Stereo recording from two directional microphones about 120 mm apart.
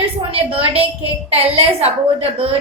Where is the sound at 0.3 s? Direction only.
55° right (ahead or behind).